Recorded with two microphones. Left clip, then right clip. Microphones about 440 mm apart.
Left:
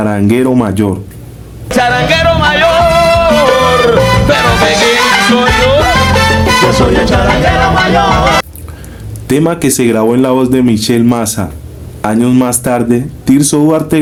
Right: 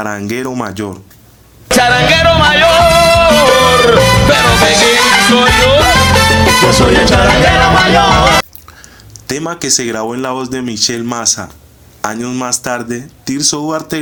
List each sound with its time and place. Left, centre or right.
0.0 s speech: right
1.6 s music: centre
9.2 s speech: right